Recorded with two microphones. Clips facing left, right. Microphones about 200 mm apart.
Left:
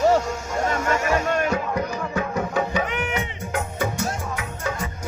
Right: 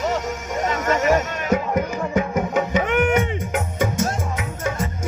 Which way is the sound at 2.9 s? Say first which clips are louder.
Right 9 dB; 50° right (ahead or behind).